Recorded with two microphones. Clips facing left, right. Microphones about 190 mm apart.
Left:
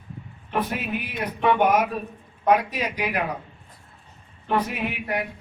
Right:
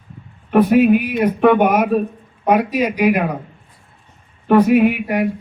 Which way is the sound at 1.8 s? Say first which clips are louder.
Right 10 dB; 60° right (ahead or behind).